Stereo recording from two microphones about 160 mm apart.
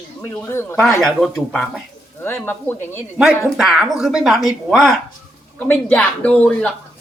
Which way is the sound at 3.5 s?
Centre (ahead or behind).